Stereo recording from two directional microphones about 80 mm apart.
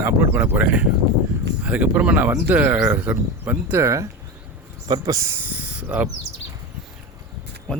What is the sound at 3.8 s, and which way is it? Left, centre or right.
Speech, right.